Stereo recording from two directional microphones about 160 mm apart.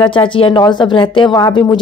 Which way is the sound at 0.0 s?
30° left (ahead or behind).